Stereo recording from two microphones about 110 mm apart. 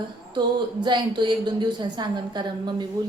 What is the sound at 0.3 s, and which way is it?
A woman's voice, 45° right (ahead or behind).